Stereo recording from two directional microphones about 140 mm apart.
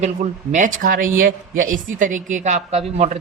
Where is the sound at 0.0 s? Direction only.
60° right (ahead or behind).